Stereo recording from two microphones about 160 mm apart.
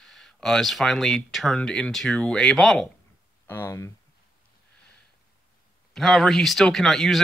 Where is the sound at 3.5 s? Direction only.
15° left (ahead or behind).